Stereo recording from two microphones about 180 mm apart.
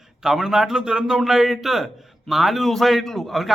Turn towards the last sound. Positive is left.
turn(degrees=0)  # may be behind; listen again after turning